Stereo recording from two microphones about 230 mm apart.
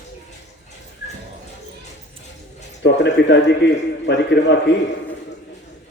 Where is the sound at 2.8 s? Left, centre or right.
Left.